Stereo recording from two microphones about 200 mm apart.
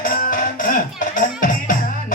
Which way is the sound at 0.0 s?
45° left (ahead or behind).